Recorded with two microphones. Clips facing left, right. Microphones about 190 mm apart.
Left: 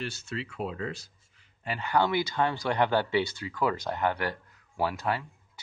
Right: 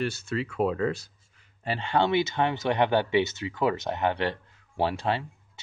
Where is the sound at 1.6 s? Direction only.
30° right (ahead or behind).